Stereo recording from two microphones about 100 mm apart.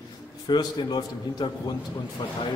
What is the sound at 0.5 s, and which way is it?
Speech, 45° left (ahead or behind).